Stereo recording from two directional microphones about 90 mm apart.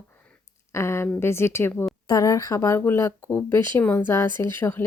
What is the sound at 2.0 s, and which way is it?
Speech, 40° left (ahead or behind).